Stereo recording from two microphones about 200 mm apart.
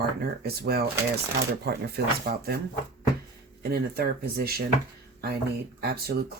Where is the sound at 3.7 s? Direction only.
50° right (ahead or behind).